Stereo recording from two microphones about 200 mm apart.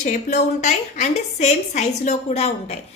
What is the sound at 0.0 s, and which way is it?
A woman's voice, 35° left (ahead or behind).